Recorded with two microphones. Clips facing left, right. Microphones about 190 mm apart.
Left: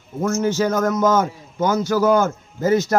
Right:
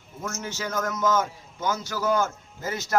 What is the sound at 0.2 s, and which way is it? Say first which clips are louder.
A man's voice: left 14 dB; 40° left (ahead or behind).